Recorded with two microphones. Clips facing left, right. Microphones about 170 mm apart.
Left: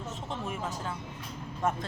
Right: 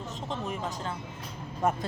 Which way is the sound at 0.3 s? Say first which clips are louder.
Right 2 dB; 5° left (ahead or behind).